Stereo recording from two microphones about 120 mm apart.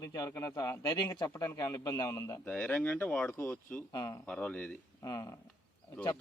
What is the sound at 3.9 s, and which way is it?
Speech, 35° left (ahead or behind).